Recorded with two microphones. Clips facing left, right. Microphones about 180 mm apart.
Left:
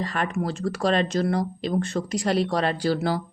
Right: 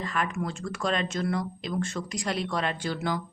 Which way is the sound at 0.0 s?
35° left (ahead or behind).